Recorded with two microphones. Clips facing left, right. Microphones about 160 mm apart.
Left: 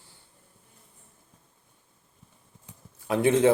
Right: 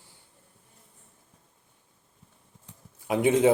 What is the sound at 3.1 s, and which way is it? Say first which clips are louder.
Speech: even; 15° right (ahead or behind).